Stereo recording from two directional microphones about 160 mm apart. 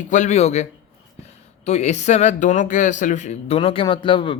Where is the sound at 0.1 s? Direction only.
50° left (ahead or behind).